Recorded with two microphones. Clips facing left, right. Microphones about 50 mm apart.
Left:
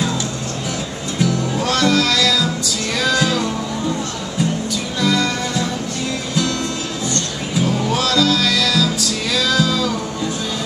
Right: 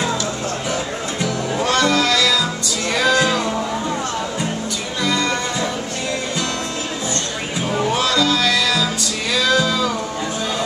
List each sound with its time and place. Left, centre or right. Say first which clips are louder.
1.2 s music: left 2 dB; centre
5.0 s music: left 1 dB; centre
7.6 s music: right 1 dB; centre